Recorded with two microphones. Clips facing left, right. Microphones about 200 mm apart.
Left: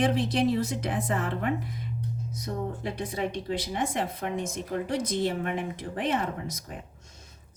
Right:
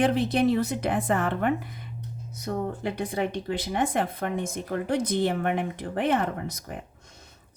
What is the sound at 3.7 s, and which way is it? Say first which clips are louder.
Speech: right 6 dB; 55° right (ahead or behind).